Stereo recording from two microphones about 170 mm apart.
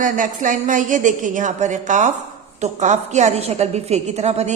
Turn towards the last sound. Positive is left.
turn(degrees=-40)  # may be behind; listen again after turning